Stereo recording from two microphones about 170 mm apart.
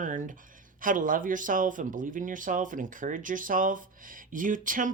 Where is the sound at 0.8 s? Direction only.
50° right (ahead or behind).